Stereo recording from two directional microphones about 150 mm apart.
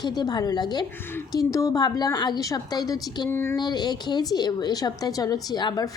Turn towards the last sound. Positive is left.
turn(degrees=25)  # may be behind; listen again after turning